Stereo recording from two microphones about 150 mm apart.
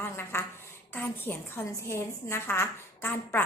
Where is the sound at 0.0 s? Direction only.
15° left (ahead or behind).